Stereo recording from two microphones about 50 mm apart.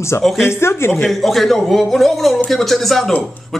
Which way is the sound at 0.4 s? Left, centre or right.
Left.